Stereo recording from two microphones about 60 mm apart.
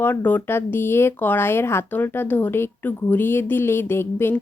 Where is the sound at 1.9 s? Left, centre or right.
Left.